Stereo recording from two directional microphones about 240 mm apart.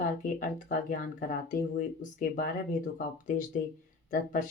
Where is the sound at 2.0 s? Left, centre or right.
Left.